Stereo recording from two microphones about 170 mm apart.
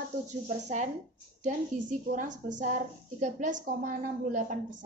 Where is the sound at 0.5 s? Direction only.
45° right (ahead or behind).